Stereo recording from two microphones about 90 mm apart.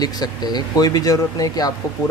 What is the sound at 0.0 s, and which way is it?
Speech, 50° left (ahead or behind).